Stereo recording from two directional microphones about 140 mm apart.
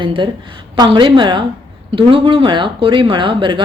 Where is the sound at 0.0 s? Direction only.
35° right (ahead or behind).